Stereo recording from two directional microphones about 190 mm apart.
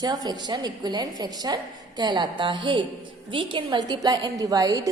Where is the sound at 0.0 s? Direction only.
20° right (ahead or behind).